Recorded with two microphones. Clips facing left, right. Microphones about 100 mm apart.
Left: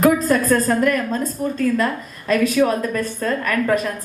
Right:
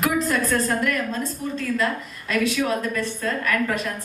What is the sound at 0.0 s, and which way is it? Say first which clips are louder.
A woman's voice: left 6 dB; 40° left (ahead or behind).